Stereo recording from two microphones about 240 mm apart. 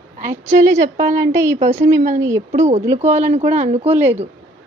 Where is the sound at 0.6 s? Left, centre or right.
Centre.